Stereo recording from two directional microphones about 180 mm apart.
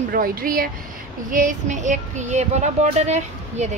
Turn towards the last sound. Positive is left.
turn(degrees=-40)  # may be behind; listen again after turning